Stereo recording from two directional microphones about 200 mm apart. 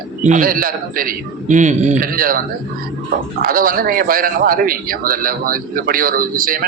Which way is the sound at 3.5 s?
45° right (ahead or behind).